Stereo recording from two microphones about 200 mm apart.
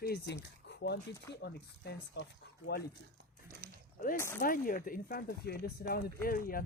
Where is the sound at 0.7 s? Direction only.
60° left (ahead or behind).